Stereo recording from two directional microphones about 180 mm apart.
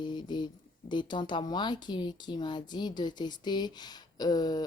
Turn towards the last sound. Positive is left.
turn(degrees=20)  # may be behind; listen again after turning